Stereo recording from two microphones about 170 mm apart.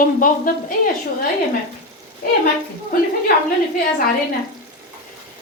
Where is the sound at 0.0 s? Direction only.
55° left (ahead or behind).